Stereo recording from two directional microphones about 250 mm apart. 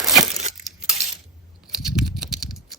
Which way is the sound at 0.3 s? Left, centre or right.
Right.